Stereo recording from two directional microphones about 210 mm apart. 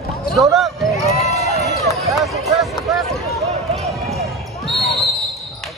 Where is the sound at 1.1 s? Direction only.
30° left (ahead or behind).